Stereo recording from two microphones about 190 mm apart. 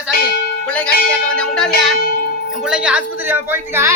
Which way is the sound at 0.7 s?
5° left (ahead or behind).